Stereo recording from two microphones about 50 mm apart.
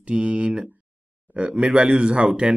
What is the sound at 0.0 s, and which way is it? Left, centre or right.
Speech, right.